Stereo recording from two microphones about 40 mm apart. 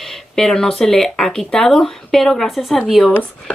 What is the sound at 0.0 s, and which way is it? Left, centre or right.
Speech, centre.